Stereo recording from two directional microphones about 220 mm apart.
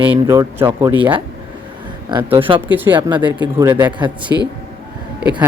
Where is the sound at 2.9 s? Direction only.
20° right (ahead or behind).